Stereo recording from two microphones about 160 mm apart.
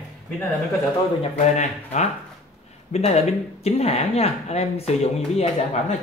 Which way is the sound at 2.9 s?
40° left (ahead or behind).